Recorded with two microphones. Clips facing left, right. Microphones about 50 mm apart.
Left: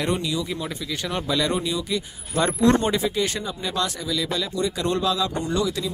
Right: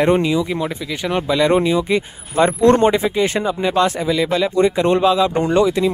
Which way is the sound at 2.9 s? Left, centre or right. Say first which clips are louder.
Right 7 dB; right.